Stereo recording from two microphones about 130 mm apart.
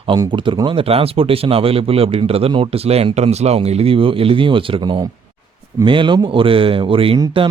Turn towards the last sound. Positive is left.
turn(degrees=-45)  # may be behind; listen again after turning